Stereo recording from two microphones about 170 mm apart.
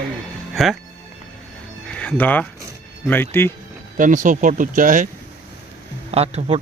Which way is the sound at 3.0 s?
10° left (ahead or behind).